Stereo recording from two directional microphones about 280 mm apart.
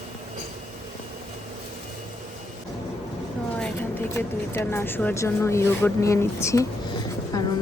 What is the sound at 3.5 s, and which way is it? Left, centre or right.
Speech, centre.